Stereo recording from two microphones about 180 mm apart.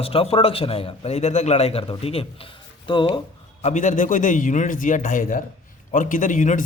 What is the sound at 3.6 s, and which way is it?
A man's voice, 40° left (ahead or behind).